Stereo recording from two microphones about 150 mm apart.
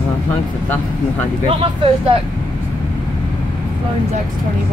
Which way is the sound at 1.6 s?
35° right (ahead or behind).